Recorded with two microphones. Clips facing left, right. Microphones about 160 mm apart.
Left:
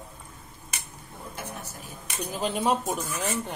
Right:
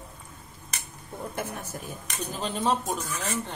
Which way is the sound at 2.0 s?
10° left (ahead or behind).